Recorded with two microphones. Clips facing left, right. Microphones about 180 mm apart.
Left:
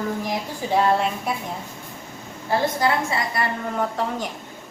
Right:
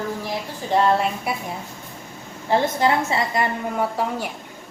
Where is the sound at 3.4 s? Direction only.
20° right (ahead or behind).